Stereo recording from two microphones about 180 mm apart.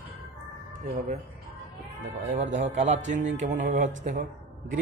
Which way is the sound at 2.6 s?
40° right (ahead or behind).